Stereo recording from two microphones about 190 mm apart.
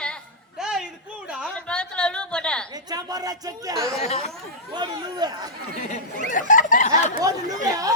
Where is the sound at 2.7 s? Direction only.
20° right (ahead or behind).